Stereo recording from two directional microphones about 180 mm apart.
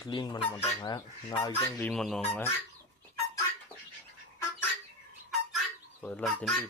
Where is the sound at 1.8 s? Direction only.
5° left (ahead or behind).